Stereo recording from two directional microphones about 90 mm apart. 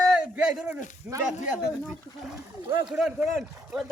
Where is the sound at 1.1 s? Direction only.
20° right (ahead or behind).